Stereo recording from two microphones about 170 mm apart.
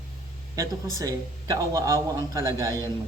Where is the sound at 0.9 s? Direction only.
20° right (ahead or behind).